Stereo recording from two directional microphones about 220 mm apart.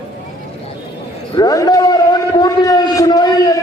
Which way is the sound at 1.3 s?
15° left (ahead or behind).